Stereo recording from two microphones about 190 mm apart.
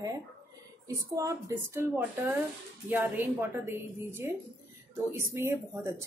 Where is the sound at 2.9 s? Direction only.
10° right (ahead or behind).